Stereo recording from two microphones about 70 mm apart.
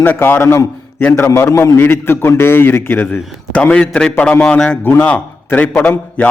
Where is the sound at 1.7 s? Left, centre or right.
Left.